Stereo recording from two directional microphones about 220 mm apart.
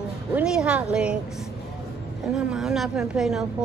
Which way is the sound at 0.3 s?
5° right (ahead or behind).